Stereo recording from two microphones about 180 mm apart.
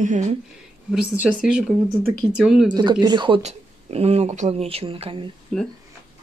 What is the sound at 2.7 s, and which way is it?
Speech, 25° right (ahead or behind).